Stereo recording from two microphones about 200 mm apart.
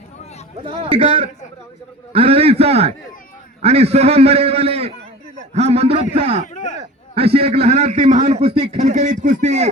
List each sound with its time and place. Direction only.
0.7 s a man's voice: 25° right (ahead or behind)
6.4 s speech: 40° left (ahead or behind)
7.2 s a man's voice: 30° right (ahead or behind)